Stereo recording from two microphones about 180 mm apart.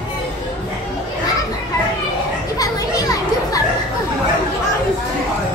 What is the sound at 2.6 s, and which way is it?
Children playing, 20° left (ahead or behind).